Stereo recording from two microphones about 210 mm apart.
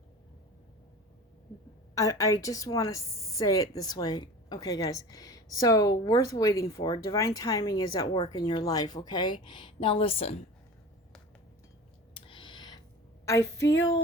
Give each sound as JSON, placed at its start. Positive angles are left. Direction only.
{"t": 2.0, "sound": "a woman's voice", "side_deg": 15}
{"t": 12.1, "sound": "a sound", "side_deg": 25}
{"t": 13.2, "sound": "a woman's voice", "side_deg": 15}